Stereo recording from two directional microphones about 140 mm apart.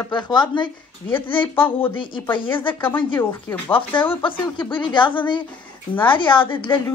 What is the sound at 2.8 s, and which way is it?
Speech, 10° left (ahead or behind).